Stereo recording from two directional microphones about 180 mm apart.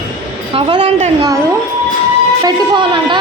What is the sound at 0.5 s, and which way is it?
Speech, 30° right (ahead or behind).